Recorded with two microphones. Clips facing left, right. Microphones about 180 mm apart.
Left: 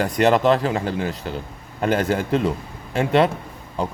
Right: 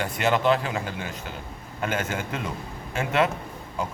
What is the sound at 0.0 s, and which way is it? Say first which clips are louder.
A man's voice: left 6 dB; 40° left (ahead or behind).